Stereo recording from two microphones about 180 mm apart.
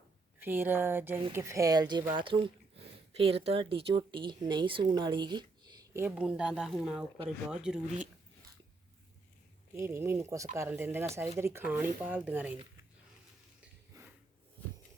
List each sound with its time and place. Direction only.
0.3 s speech: 10° right (ahead or behind)
9.7 s speech: 15° right (ahead or behind)
13.9 s snort: 20° right (ahead or behind)